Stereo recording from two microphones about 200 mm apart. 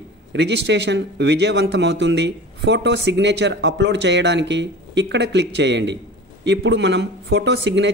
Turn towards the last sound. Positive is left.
turn(degrees=-60)  # may be behind; listen again after turning